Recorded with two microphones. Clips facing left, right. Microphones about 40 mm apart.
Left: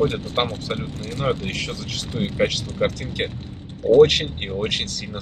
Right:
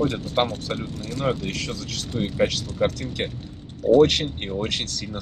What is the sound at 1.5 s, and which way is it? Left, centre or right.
Speech, left.